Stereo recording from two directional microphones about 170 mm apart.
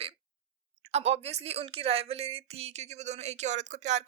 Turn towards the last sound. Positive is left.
turn(degrees=-45)  # may be behind; listen again after turning